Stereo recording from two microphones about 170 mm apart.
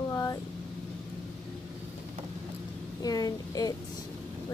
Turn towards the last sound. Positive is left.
turn(degrees=20)  # may be behind; listen again after turning